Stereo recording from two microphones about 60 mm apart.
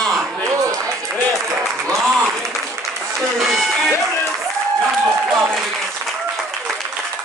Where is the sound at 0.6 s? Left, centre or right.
Right.